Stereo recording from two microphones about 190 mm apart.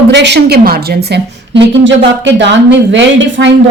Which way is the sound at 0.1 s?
65° right (ahead or behind).